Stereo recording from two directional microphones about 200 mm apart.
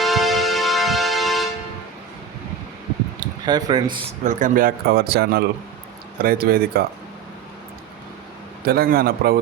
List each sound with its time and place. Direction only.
0.0 s music: centre (ahead or behind)
3.2 s a sound: 20° right (ahead or behind)
4.2 s speech: 40° right (ahead or behind)
8.6 s speech: 50° right (ahead or behind)